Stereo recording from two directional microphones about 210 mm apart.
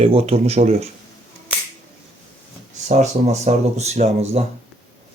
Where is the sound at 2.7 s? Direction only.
35° right (ahead or behind).